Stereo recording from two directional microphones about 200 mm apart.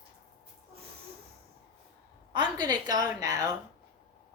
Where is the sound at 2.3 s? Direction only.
20° right (ahead or behind).